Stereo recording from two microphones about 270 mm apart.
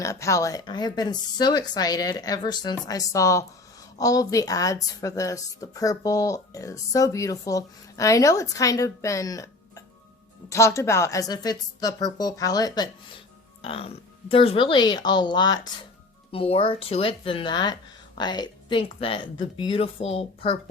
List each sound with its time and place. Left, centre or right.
0.0 s a woman's voice: centre